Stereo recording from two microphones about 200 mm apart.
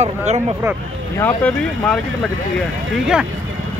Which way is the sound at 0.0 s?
35° right (ahead or behind).